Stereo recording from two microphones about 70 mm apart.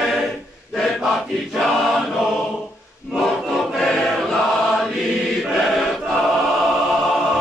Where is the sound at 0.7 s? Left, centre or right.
Centre.